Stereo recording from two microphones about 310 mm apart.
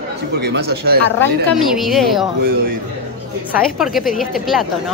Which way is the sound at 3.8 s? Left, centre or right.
Centre.